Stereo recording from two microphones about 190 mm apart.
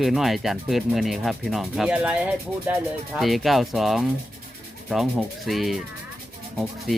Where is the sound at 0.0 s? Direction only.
Centre (ahead or behind).